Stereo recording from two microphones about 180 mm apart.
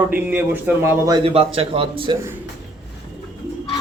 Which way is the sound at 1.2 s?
35° right (ahead or behind).